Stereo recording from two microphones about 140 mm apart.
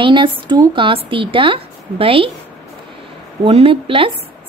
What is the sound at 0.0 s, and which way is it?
Speech, 35° right (ahead or behind).